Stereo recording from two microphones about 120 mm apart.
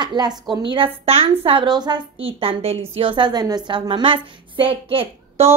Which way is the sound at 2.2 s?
50° right (ahead or behind).